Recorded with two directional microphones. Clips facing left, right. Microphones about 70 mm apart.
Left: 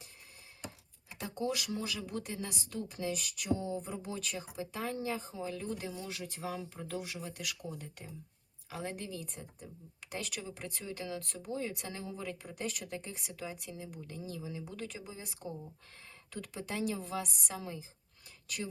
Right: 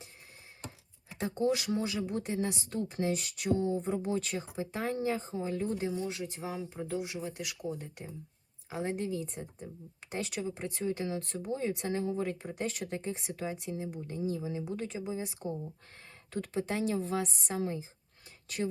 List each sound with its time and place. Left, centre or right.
1.2 s speech: right
6.5 s speech: centre
7.2 s speech: right